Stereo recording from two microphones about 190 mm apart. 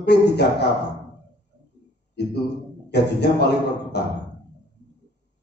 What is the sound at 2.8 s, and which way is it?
Speech, 60° left (ahead or behind).